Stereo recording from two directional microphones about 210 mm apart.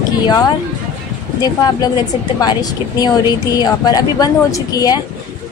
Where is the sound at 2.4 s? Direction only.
20° left (ahead or behind).